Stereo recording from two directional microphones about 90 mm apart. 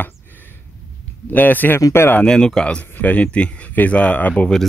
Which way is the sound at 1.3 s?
20° left (ahead or behind).